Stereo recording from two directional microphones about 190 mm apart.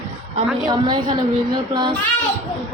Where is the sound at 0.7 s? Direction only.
25° right (ahead or behind).